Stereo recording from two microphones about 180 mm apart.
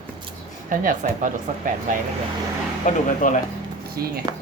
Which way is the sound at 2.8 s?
45° left (ahead or behind).